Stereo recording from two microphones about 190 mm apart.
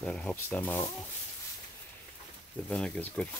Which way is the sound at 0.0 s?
5° left (ahead or behind).